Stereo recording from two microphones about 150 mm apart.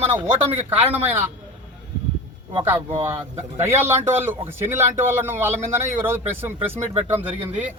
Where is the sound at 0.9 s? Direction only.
10° right (ahead or behind).